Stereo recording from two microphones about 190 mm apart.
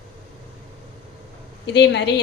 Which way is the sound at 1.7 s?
65° left (ahead or behind).